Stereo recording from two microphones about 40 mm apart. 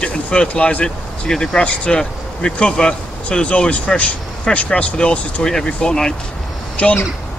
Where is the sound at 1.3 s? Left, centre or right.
Centre.